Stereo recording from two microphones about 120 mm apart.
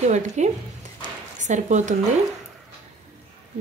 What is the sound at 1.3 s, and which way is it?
Speech, 85° right.